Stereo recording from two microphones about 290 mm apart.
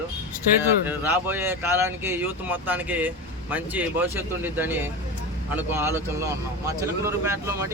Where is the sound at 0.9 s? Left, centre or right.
Centre.